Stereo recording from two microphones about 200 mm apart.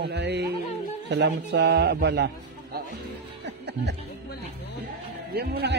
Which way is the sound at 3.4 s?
60° right (ahead or behind).